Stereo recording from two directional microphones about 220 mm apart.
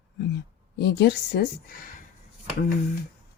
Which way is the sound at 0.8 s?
50° left (ahead or behind).